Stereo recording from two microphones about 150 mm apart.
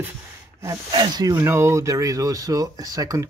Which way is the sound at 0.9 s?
30° right (ahead or behind).